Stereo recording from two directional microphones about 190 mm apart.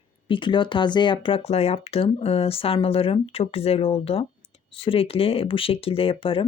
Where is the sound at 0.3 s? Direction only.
25° left (ahead or behind).